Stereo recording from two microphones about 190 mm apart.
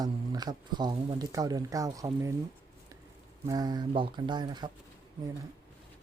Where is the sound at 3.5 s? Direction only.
20° right (ahead or behind).